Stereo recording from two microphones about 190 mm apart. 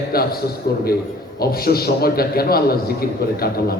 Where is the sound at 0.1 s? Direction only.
55° left (ahead or behind).